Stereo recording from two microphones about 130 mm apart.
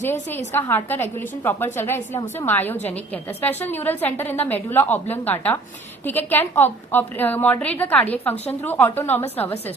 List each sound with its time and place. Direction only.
0.1 s a woman's voice: 15° left (ahead or behind)